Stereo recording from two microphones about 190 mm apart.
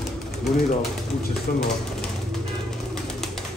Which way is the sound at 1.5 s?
45° left (ahead or behind).